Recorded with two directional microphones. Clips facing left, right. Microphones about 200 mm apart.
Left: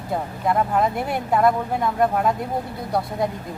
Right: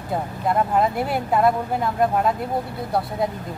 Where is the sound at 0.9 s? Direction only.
5° right (ahead or behind).